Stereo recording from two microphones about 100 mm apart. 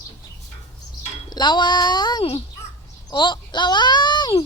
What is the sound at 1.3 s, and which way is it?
A child's voice, 50° left (ahead or behind).